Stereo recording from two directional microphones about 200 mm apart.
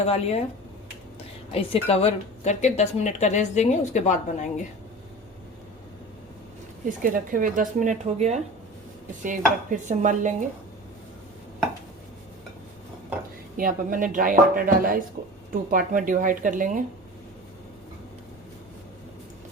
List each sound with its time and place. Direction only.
0.0 s a woman's voice: 30° left (ahead or behind)
1.5 s a woman's voice: 30° left (ahead or behind)
7.0 s speech: 45° right (ahead or behind)
13.6 s speech: 45° right (ahead or behind)